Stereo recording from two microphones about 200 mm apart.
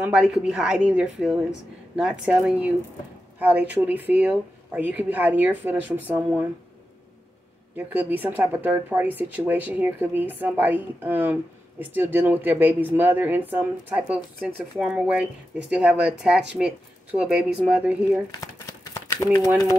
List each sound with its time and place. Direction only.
0.0 s a woman's voice: 5° right (ahead or behind)
7.7 s a woman's voice: 10° right (ahead or behind)
18.3 s crumpling: 20° left (ahead or behind)